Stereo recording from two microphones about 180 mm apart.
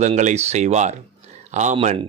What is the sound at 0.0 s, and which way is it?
Speech, 40° right (ahead or behind).